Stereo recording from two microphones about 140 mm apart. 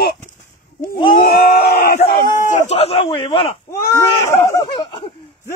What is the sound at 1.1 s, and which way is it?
Speech, 90° left.